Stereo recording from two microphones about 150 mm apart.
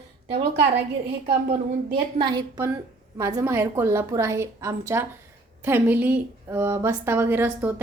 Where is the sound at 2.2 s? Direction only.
30° right (ahead or behind).